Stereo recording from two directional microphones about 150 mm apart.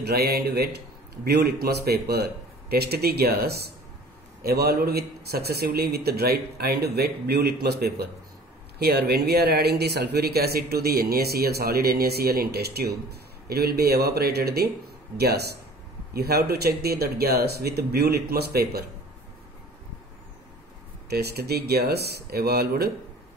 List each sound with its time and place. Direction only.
0.0 s speech: 90° right
21.1 s speech: 90° right